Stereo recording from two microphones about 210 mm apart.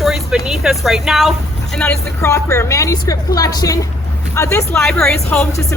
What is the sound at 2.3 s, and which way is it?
Speech, 15° left (ahead or behind).